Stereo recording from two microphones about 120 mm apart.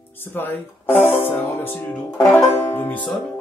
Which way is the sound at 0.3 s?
15° left (ahead or behind).